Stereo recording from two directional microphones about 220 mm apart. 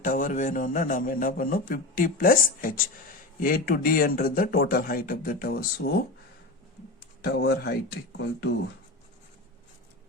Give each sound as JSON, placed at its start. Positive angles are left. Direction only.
{"t": 0.0, "sound": "a man's voice", "side_deg": 35}
{"t": 7.3, "sound": "speech", "side_deg": 45}